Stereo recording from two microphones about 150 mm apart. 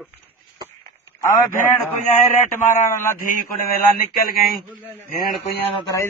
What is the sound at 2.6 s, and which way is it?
Speech, 55° left (ahead or behind).